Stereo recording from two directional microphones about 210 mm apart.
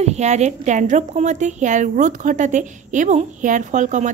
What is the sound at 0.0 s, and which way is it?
A woman's voice, 30° right (ahead or behind).